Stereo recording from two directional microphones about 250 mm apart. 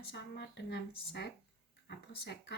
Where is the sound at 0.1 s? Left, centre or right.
Left.